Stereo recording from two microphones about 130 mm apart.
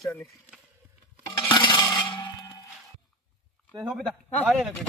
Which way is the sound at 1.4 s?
35° left (ahead or behind).